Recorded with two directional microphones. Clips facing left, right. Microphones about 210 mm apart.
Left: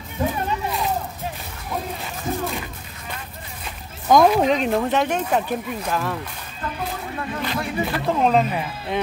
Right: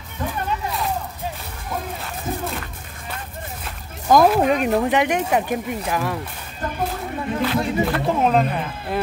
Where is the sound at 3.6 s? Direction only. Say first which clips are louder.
Even; centre (ahead or behind).